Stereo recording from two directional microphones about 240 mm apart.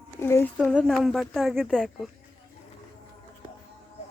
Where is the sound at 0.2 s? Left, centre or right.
Centre.